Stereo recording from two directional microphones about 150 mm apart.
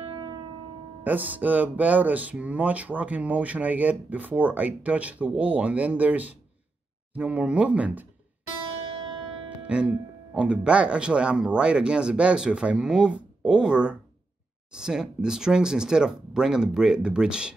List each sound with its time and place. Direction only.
0.0 s music: 30° right (ahead or behind)
1.0 s speech: 10° right (ahead or behind)
9.7 s speech: 5° right (ahead or behind)